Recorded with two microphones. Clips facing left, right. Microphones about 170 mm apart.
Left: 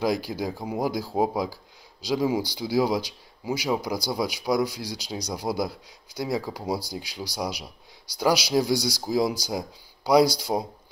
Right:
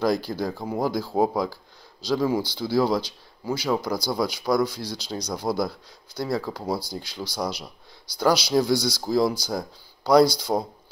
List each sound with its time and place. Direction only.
0.0 s speech: 10° left (ahead or behind)